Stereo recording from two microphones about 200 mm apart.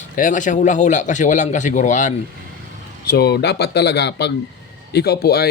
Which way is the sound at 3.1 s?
55° left (ahead or behind).